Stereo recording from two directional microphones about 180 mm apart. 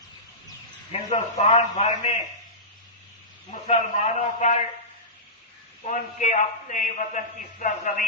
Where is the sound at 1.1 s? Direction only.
35° left (ahead or behind).